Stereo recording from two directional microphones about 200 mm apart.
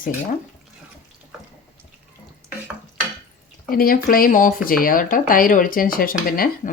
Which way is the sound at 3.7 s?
45° left (ahead or behind).